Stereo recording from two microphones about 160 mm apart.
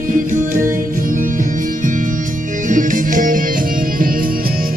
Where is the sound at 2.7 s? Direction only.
55° right (ahead or behind).